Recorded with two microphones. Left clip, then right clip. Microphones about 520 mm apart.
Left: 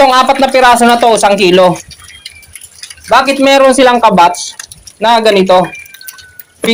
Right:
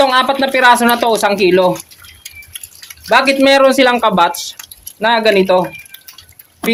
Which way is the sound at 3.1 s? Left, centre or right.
Right.